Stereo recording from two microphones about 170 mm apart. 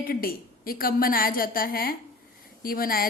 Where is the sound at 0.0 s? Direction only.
60° left (ahead or behind).